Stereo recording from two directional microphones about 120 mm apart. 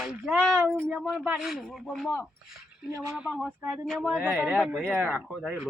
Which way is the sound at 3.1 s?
10° right (ahead or behind).